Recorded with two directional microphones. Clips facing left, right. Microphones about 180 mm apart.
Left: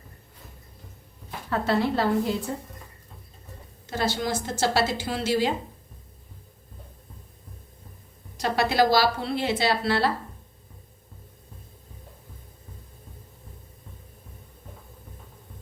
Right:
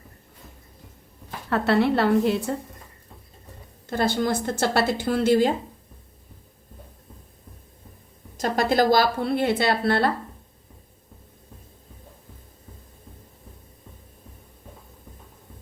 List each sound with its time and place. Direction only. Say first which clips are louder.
1.5 s a woman's voice: right 4 dB; 70° right (ahead or behind)
3.8 s a woman's voice: right 4 dB; 55° right (ahead or behind)
8.4 s a woman's voice: right 1 dB; 45° right (ahead or behind)